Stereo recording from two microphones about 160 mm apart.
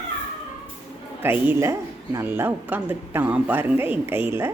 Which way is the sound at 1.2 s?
15° right (ahead or behind).